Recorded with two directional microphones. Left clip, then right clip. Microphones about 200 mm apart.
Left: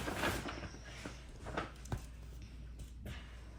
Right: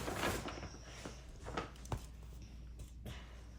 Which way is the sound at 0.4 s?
Centre (ahead or behind).